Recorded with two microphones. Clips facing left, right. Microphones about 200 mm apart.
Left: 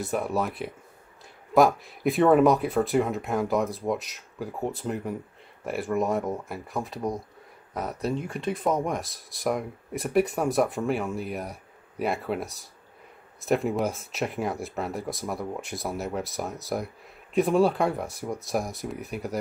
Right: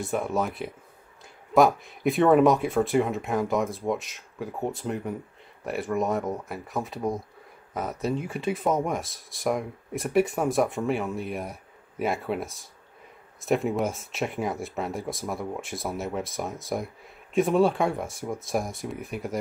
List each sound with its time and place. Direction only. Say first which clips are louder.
0.0 s speech: even; centre (ahead or behind)